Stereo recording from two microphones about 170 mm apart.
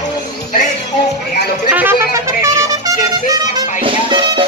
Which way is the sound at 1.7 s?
10° right (ahead or behind).